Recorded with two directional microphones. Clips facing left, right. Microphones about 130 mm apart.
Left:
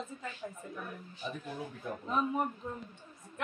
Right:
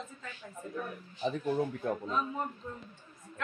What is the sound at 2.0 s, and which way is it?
Speech, 15° left (ahead or behind).